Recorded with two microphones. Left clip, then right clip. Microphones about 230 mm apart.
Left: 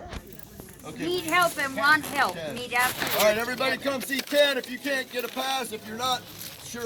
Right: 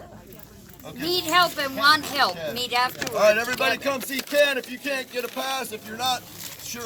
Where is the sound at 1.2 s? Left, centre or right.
Right.